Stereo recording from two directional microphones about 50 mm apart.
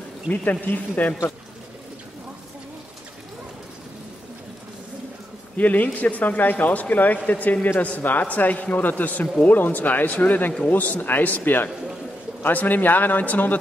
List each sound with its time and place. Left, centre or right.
0.3 s speech: left
5.6 s speech: left